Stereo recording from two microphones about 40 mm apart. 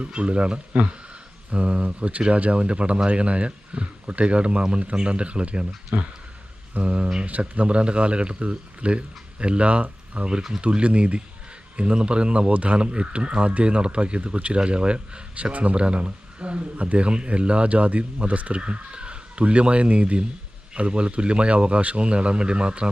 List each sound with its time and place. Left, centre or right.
0.0 s speech: right
5.9 s speech: right
6.7 s speech: right